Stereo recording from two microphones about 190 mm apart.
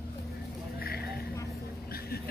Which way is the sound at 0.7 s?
55° left (ahead or behind).